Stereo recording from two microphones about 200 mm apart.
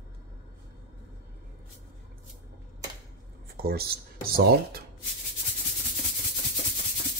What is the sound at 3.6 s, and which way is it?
Speech, 50° right (ahead or behind).